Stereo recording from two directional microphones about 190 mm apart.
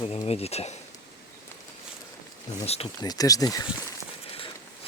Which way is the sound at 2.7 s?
30° left (ahead or behind).